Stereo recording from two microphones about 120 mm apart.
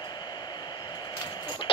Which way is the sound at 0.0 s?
35° left (ahead or behind).